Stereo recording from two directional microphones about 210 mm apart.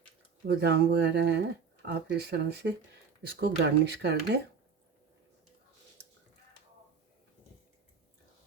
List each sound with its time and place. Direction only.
0.4 s speech: 50° right (ahead or behind)